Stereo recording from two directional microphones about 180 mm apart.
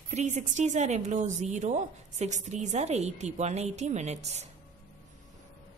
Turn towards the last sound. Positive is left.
turn(degrees=-40)  # may be behind; listen again after turning